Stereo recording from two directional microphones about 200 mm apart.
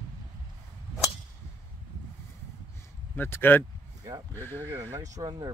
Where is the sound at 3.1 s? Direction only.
10° left (ahead or behind).